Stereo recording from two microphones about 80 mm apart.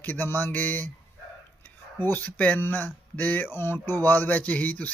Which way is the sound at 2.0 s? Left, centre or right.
Left.